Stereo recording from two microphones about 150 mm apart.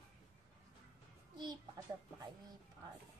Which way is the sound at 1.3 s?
30° right (ahead or behind).